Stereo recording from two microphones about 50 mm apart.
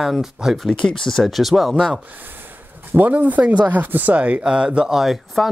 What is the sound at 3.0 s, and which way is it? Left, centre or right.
Speech, right.